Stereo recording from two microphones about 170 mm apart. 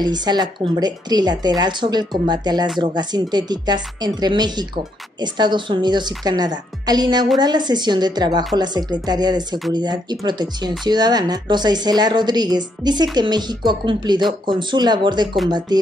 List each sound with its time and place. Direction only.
0.0 s a woman's voice: 25° right (ahead or behind)